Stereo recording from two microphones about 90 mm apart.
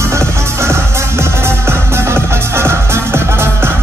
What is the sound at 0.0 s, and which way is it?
Music, 30° right (ahead or behind).